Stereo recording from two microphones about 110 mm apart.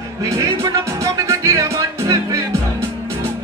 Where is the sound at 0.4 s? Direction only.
30° right (ahead or behind).